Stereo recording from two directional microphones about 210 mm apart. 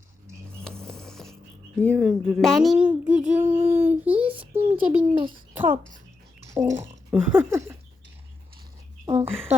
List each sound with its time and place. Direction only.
0.8 s music: 5° left (ahead or behind)
1.8 s speech: 5° left (ahead or behind); by 7.8 s 10° right (ahead or behind)
9.3 s speech: 5° left (ahead or behind)